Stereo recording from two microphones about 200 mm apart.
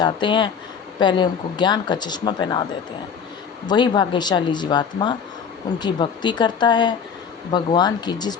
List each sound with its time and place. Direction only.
0.0 s speech: 25° left (ahead or behind)
3.7 s speech: 20° left (ahead or behind)